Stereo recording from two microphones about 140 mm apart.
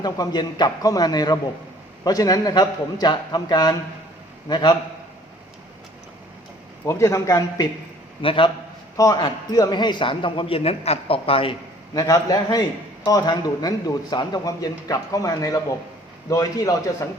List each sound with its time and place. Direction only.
0.0 s a man's voice: 30° left (ahead or behind)
6.8 s a man's voice: 20° left (ahead or behind)
8.2 s a man's voice: 40° left (ahead or behind)
9.0 s a man's voice: 25° left (ahead or behind)
11.9 s a man's voice: 25° left (ahead or behind)